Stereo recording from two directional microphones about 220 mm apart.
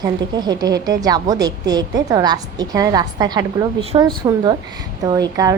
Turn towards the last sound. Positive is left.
turn(degrees=-15)  # may be behind; listen again after turning